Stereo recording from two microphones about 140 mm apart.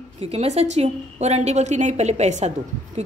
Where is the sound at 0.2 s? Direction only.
45° right (ahead or behind).